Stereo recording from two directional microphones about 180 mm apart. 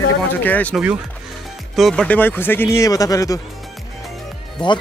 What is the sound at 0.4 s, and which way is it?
Speech, 10° left (ahead or behind).